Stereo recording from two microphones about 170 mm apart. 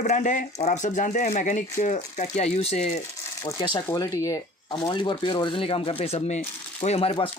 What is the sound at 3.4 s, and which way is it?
Speech, 20° left (ahead or behind).